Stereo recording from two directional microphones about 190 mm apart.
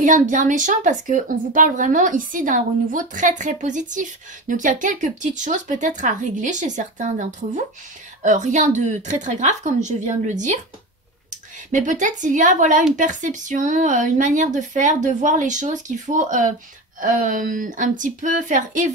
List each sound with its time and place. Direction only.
0.0 s a woman's voice: 40° right (ahead or behind)